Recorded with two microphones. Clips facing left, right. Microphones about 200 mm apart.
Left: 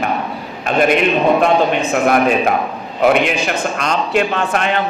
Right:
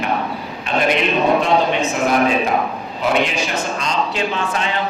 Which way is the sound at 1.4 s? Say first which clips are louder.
Left 3 dB; 55° left (ahead or behind).